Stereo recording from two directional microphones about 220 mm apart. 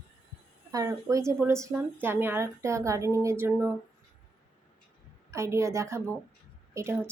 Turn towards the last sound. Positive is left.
turn(degrees=-10)  # may be behind; listen again after turning